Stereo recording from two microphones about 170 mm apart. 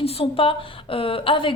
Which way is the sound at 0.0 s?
35° left (ahead or behind).